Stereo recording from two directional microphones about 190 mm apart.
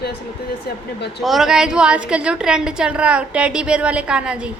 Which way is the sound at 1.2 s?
Centre (ahead or behind).